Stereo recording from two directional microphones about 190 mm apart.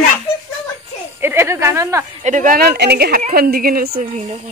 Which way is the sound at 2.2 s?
40° right (ahead or behind).